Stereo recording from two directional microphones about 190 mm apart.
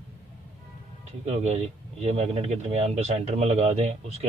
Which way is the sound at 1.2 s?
35° right (ahead or behind).